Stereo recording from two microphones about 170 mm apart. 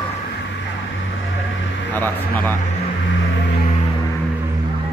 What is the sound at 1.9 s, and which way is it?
Speech, 10° left (ahead or behind).